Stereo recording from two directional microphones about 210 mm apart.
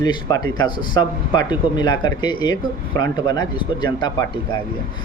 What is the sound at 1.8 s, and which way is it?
Speech, 20° left (ahead or behind).